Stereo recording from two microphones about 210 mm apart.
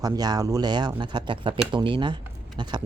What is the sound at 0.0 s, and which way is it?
A man's voice, 20° right (ahead or behind).